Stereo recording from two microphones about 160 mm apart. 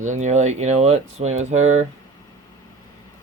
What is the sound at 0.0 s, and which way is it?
Speech, 50° right (ahead or behind).